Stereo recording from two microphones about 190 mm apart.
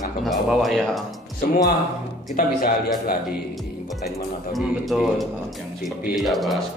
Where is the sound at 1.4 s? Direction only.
50° left (ahead or behind).